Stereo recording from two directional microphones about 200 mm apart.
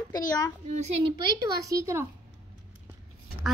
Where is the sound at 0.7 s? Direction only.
30° right (ahead or behind).